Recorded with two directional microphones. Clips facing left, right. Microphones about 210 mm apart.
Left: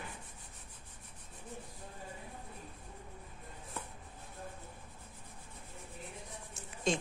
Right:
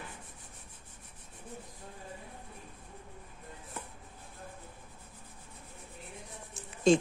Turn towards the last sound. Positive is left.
turn(degrees=-30)  # may be behind; listen again after turning